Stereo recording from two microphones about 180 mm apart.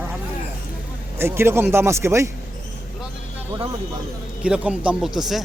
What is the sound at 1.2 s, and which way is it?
Speech, 15° right (ahead or behind).